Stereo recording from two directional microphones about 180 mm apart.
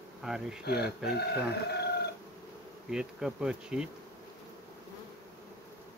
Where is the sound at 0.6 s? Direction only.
65° left (ahead or behind).